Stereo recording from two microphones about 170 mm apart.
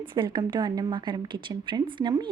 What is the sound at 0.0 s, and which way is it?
A woman's voice, 30° right (ahead or behind).